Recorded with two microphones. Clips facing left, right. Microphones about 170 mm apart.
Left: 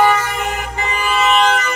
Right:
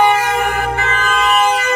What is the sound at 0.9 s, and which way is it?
Music, 10° left (ahead or behind).